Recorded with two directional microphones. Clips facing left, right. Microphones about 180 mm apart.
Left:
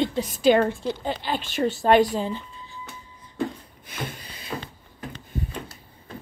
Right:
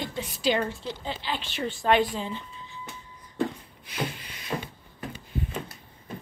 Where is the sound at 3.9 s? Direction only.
50° left (ahead or behind); by 4.5 s 35° left (ahead or behind).